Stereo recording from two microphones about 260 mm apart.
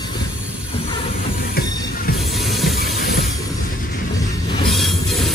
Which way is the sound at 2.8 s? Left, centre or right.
Left.